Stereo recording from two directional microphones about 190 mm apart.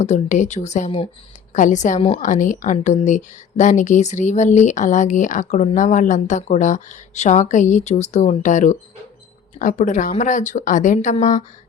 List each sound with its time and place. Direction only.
0.0 s a woman's voice: 40° left (ahead or behind)